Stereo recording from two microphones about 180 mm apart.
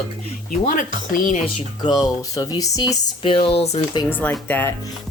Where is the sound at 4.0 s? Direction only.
10° left (ahead or behind).